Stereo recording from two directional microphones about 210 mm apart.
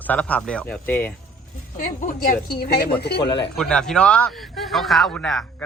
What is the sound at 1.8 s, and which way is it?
A woman's voice, 40° left (ahead or behind).